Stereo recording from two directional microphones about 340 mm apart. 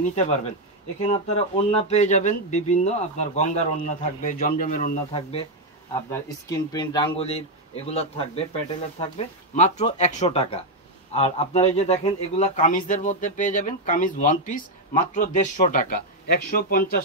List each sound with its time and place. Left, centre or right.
0.0 s speech: centre
6.0 s speech: centre; by 16.9 s left